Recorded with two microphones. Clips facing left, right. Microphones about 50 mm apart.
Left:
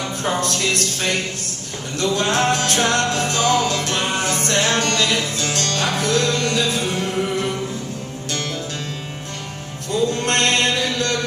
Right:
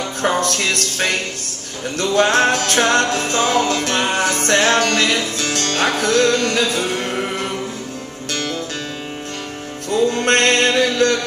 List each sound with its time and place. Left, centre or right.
0.3 s music: right
2.0 s music: right
10.1 s music: right